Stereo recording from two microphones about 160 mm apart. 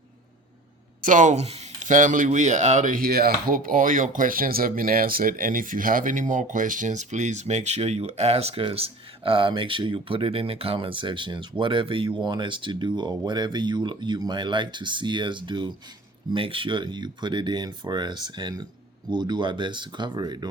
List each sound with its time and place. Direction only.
1.0 s speech: 50° right (ahead or behind); by 20.5 s 25° right (ahead or behind)